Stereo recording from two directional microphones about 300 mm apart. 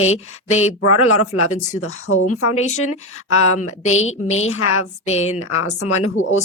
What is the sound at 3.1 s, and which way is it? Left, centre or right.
Speech, left.